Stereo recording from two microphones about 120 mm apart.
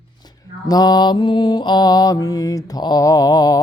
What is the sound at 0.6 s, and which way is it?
Mantra, 35° left (ahead or behind).